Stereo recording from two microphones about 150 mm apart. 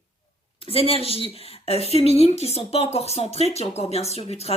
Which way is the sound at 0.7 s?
40° left (ahead or behind).